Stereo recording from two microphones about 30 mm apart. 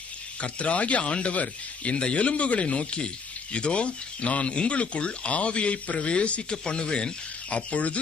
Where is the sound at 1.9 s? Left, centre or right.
Left.